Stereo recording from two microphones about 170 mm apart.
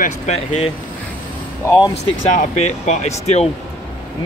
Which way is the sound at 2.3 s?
45° left (ahead or behind).